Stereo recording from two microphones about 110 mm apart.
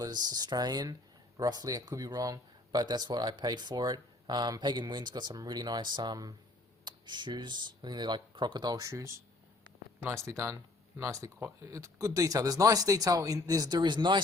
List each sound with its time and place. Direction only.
0.0 s speech: 40° right (ahead or behind)